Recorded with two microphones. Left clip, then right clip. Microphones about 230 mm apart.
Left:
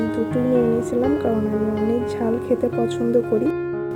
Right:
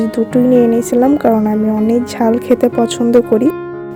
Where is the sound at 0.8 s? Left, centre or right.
Right.